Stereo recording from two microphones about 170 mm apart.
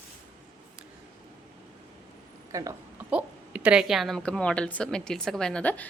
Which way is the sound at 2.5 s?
20° right (ahead or behind).